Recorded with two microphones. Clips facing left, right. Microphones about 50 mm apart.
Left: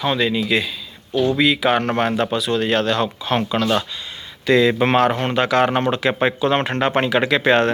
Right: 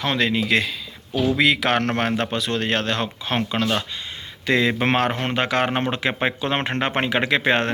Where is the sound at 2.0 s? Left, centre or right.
Right.